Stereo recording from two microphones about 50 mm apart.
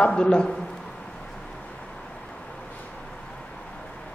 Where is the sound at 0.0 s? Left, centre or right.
Centre.